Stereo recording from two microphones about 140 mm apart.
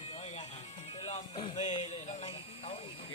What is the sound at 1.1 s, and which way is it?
Speech, 40° left (ahead or behind).